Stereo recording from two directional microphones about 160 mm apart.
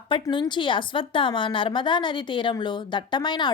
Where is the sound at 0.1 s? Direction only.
30° left (ahead or behind).